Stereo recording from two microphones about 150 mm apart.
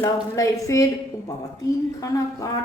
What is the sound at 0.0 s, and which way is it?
Speech, 20° left (ahead or behind).